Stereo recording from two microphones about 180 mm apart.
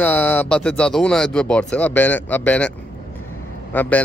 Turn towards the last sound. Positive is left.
turn(degrees=10)  # may be behind; listen again after turning